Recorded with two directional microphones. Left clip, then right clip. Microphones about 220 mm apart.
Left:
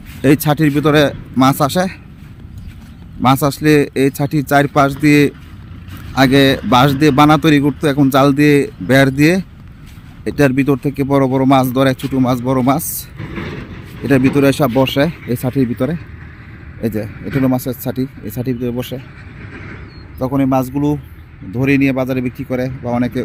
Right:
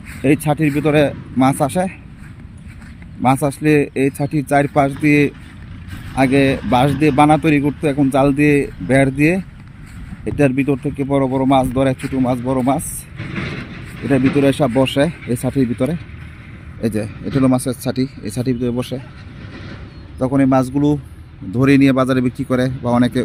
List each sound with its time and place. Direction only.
0.2 s a man's voice: 25° left (ahead or behind)
3.2 s a man's voice: 20° left (ahead or behind)
13.1 s vehicle: 45° right (ahead or behind)
14.3 s speech: 15° left (ahead or behind); by 19.0 s 5° right (ahead or behind)
19.5 s a sound: 35° right (ahead or behind)
20.1 s speech: 5° right (ahead or behind)